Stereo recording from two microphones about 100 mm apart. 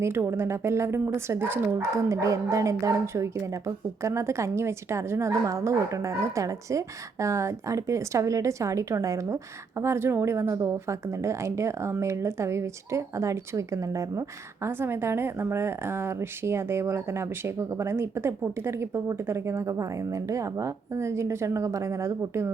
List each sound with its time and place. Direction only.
0.0 s a woman's voice: 25° right (ahead or behind)